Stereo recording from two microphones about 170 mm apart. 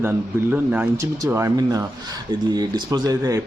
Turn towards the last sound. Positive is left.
turn(degrees=-20)  # may be behind; listen again after turning